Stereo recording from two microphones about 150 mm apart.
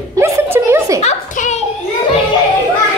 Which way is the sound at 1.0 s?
50° left (ahead or behind).